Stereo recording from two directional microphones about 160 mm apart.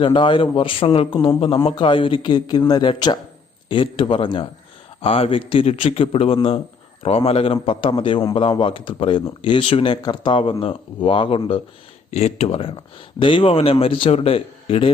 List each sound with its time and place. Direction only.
0.0 s speech: 30° left (ahead or behind)